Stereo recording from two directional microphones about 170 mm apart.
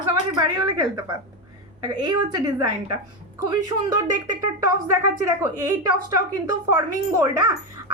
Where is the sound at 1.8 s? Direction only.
25° right (ahead or behind).